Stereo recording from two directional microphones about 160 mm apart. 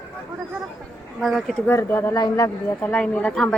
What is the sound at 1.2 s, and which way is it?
Speech, centre (ahead or behind).